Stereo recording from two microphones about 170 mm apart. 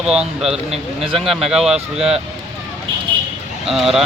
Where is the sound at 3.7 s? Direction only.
Centre (ahead or behind).